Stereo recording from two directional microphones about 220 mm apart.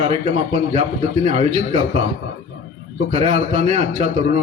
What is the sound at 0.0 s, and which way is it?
A man's voice, 30° right (ahead or behind).